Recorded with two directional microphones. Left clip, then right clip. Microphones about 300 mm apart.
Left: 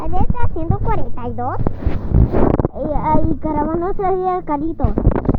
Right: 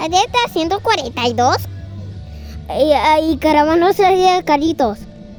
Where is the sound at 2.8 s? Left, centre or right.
Right.